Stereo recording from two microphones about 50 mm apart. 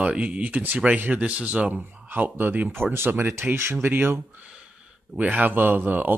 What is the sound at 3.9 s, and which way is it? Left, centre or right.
Speech, right.